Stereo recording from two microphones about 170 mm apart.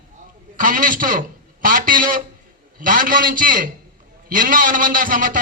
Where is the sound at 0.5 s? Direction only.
50° right (ahead or behind).